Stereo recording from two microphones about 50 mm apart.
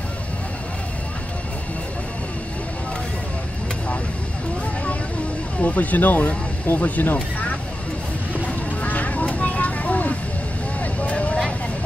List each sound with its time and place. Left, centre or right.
5.6 s speech: left
8.5 s vehicle: left